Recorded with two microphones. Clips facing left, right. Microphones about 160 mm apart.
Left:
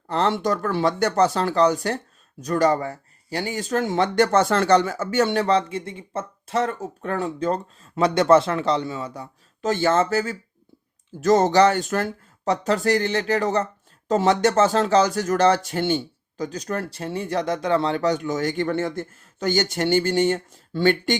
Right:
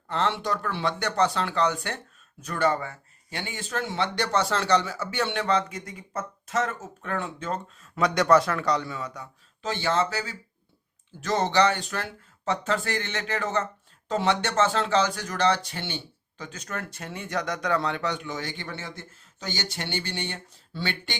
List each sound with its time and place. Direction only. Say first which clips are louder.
0.1 s speech: left 5 dB; 40° left (ahead or behind)
9.6 s speech: left 6 dB; 45° left (ahead or behind)